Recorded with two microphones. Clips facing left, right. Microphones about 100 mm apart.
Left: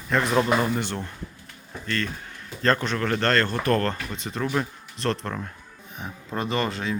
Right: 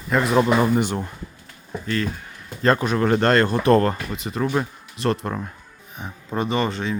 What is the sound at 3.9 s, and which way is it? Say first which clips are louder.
Speech: right 4 dB; 5° right (ahead or behind).